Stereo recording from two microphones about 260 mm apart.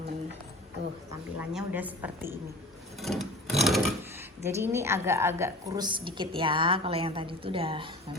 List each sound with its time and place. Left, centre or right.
1.4 s a woman's voice: centre
3.0 s wood: centre
4.4 s a woman's voice: centre